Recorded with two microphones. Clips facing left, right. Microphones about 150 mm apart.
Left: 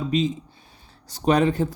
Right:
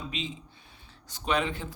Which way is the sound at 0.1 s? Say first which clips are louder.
Left 14 dB; 40° left (ahead or behind).